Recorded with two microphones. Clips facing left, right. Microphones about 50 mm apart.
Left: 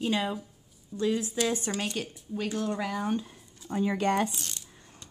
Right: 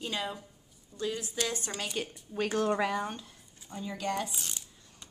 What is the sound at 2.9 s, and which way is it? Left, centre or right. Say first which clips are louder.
Speech: left 2 dB; centre.